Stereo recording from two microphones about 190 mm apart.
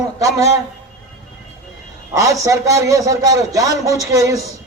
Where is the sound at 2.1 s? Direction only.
15° right (ahead or behind).